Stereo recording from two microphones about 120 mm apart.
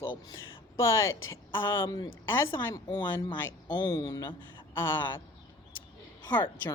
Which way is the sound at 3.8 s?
30° left (ahead or behind).